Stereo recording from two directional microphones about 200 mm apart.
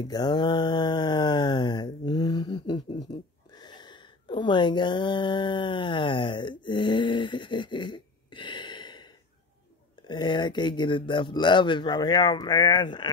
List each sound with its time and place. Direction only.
0.0 s mantra: 20° left (ahead or behind)
3.1 s a sound: 20° left (ahead or behind)
10.0 s speech: 20° left (ahead or behind)